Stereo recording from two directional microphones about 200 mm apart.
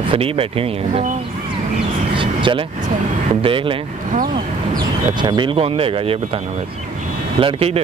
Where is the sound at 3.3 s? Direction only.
25° right (ahead or behind).